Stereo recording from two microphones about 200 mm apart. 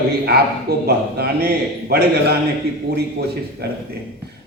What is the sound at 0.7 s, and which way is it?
Speech, 50° right (ahead or behind).